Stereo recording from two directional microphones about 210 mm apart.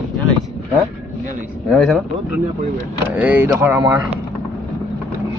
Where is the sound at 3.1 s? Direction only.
10° right (ahead or behind).